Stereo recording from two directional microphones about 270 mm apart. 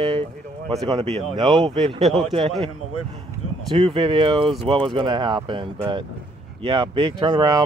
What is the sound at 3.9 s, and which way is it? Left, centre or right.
Speech, centre.